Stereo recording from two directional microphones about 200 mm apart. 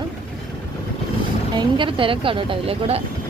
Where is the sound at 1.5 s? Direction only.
25° right (ahead or behind).